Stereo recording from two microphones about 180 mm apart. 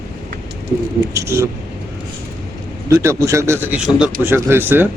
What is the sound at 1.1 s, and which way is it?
Speech, 15° right (ahead or behind).